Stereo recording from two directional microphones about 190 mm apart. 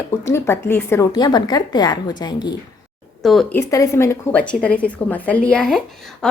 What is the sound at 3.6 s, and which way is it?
A woman's voice, 15° left (ahead or behind).